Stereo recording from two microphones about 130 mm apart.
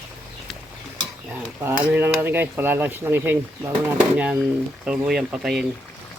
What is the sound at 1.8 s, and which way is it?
Speech, 15° right (ahead or behind).